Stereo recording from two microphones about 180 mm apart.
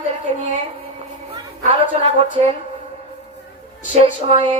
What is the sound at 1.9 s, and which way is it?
Speech, 30° right (ahead or behind).